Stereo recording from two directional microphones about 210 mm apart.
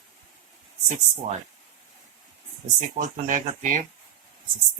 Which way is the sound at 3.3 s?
40° right (ahead or behind).